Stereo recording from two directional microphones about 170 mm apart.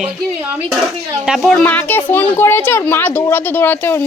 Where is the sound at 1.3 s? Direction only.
Centre (ahead or behind).